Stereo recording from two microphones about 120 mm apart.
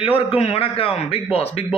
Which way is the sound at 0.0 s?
50° left (ahead or behind).